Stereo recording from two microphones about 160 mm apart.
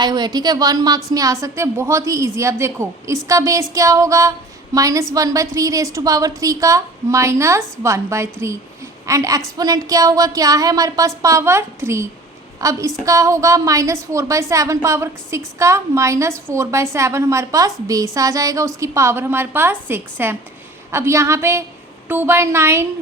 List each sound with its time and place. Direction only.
0.0 s a woman's voice: 25° right (ahead or behind)